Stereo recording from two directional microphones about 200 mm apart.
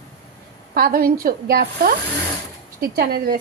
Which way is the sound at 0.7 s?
50° right (ahead or behind).